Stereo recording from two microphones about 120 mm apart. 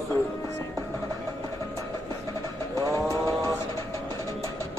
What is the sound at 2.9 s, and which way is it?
Vehicle, 30° left (ahead or behind).